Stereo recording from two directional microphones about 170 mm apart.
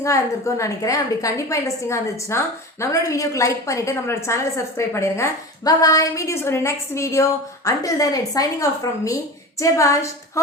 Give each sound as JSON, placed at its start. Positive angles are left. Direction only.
{"t": 0.0, "sound": "a woman's voice", "side_deg": 20}